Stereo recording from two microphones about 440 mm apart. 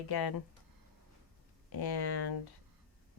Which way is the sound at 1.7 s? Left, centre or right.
Left.